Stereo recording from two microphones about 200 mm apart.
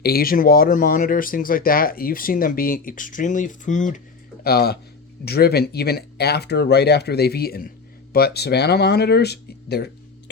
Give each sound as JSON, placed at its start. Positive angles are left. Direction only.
{"t": 0.0, "sound": "speech", "side_deg": 50}
{"t": 4.4, "sound": "speech", "side_deg": 50}